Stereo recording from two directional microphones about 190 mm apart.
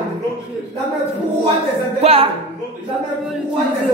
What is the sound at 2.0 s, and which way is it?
Speech, 35° right (ahead or behind).